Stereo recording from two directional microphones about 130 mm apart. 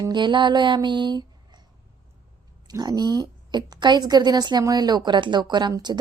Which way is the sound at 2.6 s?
30° right (ahead or behind).